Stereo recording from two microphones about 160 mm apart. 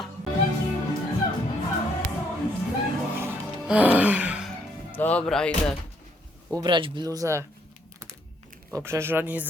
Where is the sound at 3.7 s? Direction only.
10° right (ahead or behind).